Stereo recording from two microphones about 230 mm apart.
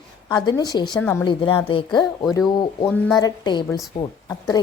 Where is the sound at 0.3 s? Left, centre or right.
Centre.